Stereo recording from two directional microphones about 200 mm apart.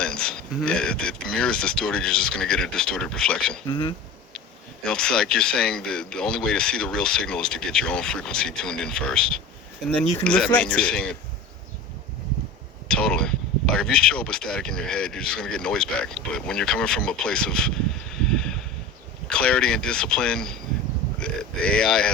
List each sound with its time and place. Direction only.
0.0 s speech: 5° left (ahead or behind)
3.7 s speech: 25° left (ahead or behind)
4.4 s speech: 5° left (ahead or behind)
12.9 s speech: 5° left (ahead or behind)